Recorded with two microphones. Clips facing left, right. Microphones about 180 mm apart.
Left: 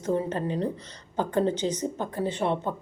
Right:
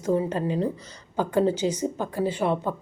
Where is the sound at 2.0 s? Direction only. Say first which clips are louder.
Right 4 dB; 25° left (ahead or behind).